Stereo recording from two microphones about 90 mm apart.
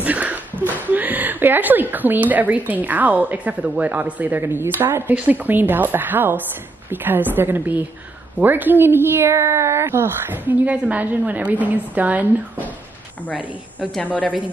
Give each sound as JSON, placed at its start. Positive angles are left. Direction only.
{"t": 0.0, "sound": "a woman's voice", "side_deg": -15}
{"t": 14.0, "sound": "a woman's voice", "side_deg": 15}